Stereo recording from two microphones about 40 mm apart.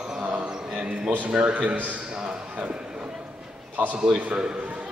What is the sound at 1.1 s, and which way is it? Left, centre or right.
Speech, right.